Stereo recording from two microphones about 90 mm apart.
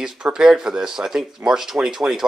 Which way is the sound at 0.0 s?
10° right (ahead or behind).